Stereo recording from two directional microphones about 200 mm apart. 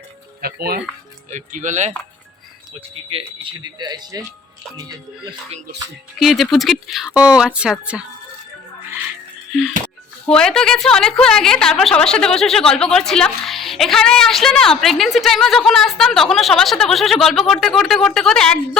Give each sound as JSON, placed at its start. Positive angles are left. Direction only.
{"t": 0.4, "sound": "speech", "side_deg": -50}
{"t": 1.3, "sound": "speech", "side_deg": -40}
{"t": 3.1, "sound": "speech", "side_deg": -25}
{"t": 6.1, "sound": "a woman's voice", "side_deg": 0}
{"t": 10.2, "sound": "a woman's voice", "side_deg": 5}